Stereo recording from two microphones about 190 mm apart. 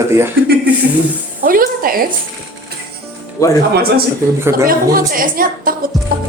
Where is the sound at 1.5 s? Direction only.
50° right (ahead or behind).